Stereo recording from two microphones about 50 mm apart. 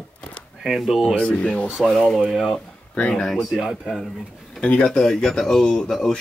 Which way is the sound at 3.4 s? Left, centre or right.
Centre.